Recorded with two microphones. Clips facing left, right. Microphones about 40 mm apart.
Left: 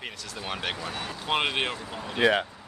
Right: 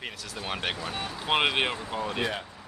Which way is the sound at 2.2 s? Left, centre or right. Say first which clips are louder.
Left 13 dB; left.